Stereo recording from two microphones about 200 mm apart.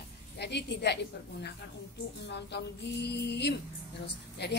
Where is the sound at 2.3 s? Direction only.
55° left (ahead or behind).